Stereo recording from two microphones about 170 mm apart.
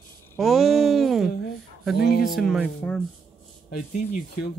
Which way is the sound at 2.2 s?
Centre (ahead or behind).